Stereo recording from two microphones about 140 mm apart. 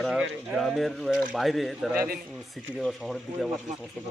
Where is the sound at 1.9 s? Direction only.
90° right.